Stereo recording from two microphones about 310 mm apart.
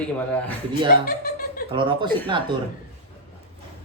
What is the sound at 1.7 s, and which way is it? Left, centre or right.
Speech, centre.